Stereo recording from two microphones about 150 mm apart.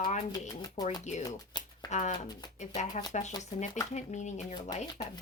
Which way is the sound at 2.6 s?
50° left (ahead or behind).